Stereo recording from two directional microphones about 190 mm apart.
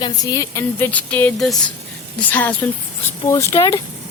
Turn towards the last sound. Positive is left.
turn(degrees=15)  # may be behind; listen again after turning